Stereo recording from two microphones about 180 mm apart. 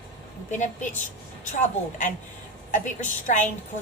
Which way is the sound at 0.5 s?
40° left (ahead or behind).